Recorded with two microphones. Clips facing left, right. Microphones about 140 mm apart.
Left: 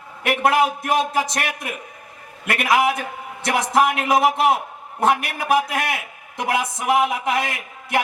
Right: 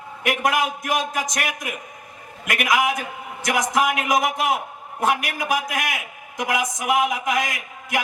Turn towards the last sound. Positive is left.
turn(degrees=30)  # may be behind; listen again after turning